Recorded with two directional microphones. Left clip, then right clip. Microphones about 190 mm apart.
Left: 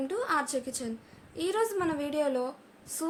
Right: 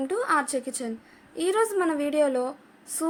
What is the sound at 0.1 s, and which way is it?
A woman's voice, 30° right (ahead or behind).